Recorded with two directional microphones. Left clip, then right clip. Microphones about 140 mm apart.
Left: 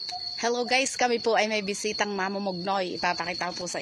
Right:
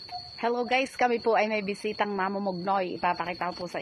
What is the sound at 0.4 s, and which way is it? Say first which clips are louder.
A woman's voice: left 1 dB; 20° left (ahead or behind).